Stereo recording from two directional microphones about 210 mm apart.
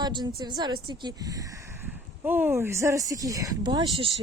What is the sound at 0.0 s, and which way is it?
A woman's voice, 20° right (ahead or behind).